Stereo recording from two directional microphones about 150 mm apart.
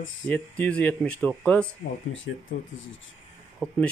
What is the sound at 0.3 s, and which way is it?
Speech, 5° left (ahead or behind).